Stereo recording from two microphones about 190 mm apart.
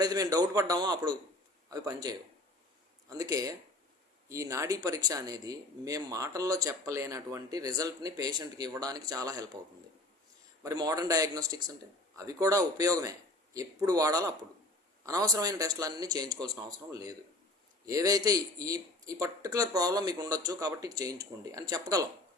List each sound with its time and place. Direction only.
0.0 s speech: 20° right (ahead or behind)
10.6 s a man's voice: 20° right (ahead or behind)